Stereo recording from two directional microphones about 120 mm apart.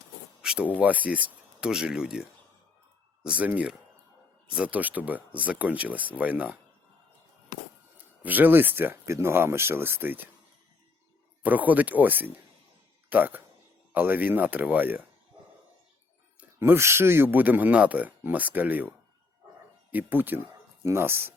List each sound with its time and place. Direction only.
0.4 s speech: 5° right (ahead or behind)
3.2 s speech: 10° right (ahead or behind)
8.2 s speech: 15° right (ahead or behind)
11.4 s speech: 15° right (ahead or behind)
16.4 s speech: 20° right (ahead or behind)